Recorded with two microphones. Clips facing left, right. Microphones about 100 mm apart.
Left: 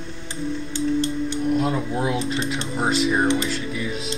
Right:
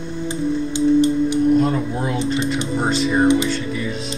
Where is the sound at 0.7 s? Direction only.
15° right (ahead or behind).